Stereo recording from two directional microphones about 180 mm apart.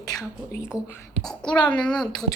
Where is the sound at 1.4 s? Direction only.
25° left (ahead or behind).